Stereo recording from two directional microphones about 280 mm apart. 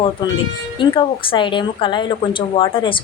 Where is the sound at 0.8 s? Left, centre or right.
Centre.